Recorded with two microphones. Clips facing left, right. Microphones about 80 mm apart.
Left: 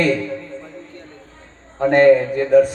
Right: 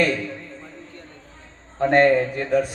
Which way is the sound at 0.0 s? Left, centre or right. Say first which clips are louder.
Left 3 dB; left.